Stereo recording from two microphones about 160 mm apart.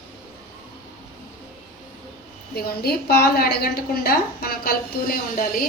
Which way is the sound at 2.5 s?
75° left (ahead or behind).